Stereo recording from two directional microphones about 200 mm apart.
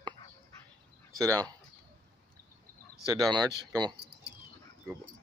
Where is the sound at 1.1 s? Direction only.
15° right (ahead or behind).